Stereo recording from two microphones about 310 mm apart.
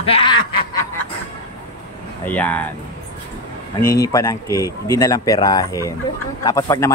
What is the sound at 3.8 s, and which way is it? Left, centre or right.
Speech, centre.